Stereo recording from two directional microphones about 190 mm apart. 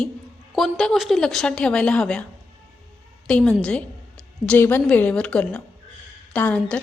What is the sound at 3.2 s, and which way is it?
A woman's voice, 5° left (ahead or behind).